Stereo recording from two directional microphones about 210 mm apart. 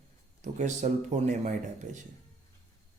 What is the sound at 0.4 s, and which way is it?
Speech, 35° right (ahead or behind).